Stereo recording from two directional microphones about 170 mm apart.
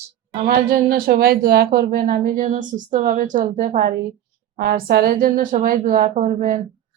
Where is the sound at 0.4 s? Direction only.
65° right (ahead or behind).